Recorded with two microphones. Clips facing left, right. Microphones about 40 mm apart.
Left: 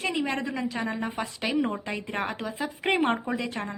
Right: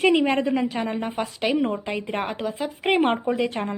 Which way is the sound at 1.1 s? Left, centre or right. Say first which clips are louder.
Right 4 dB; centre.